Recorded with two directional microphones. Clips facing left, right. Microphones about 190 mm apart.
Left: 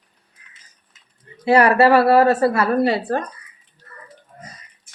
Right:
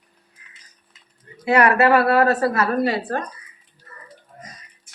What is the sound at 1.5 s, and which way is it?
A woman's voice, 30° left (ahead or behind).